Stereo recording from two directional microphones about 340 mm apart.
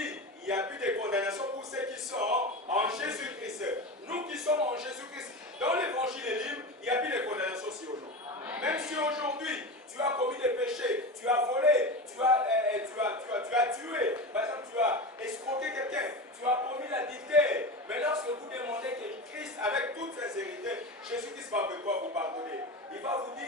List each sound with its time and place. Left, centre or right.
0.0 s a man's voice: centre